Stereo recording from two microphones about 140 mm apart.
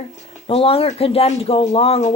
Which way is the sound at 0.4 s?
45° left (ahead or behind).